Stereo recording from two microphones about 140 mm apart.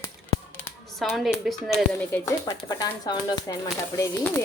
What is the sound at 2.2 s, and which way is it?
Speech, 25° left (ahead or behind).